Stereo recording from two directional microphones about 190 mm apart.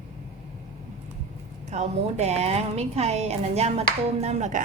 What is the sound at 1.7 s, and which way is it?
A woman's voice, 35° right (ahead or behind).